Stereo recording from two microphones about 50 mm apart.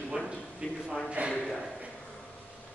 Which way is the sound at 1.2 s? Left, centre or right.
Right.